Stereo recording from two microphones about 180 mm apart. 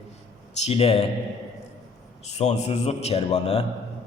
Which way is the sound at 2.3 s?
40° left (ahead or behind).